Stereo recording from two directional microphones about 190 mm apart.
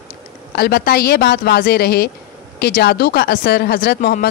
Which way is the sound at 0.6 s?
55° left (ahead or behind).